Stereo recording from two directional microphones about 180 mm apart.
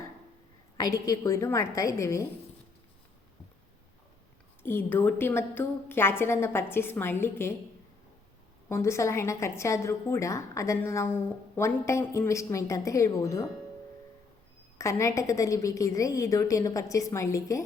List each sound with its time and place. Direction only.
0.8 s speech: 20° left (ahead or behind)
4.6 s speech: 10° left (ahead or behind)
8.7 s speech: 15° left (ahead or behind)
14.8 s speech: 15° left (ahead or behind)